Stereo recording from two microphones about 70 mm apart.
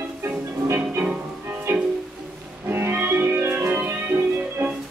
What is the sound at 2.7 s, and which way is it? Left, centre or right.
Music, right.